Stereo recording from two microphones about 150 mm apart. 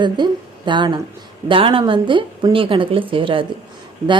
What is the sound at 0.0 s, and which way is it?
Speech, 30° right (ahead or behind).